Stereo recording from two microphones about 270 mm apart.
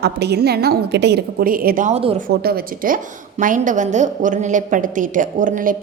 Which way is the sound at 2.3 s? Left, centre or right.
Right.